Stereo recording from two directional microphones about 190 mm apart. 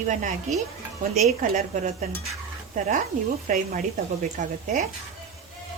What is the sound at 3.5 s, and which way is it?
A woman's voice, 45° right (ahead or behind).